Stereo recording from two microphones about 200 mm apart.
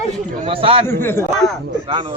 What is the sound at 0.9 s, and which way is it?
Speech, 10° left (ahead or behind).